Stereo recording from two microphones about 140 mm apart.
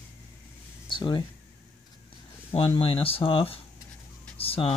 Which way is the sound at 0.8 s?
35° left (ahead or behind).